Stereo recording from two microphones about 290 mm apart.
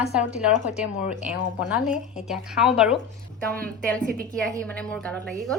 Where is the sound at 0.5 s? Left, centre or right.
Left.